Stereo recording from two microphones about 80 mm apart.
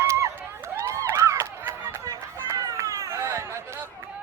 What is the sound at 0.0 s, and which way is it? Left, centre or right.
Crowd, right.